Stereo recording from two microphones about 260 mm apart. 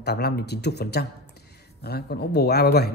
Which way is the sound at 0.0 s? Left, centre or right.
Left.